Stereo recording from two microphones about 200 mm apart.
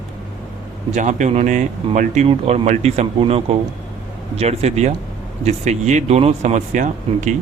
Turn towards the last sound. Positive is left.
turn(degrees=-40)  # may be behind; listen again after turning